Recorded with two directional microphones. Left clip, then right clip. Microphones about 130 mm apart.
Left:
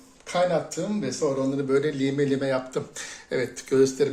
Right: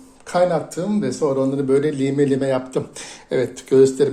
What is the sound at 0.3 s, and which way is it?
Speech, 45° right (ahead or behind).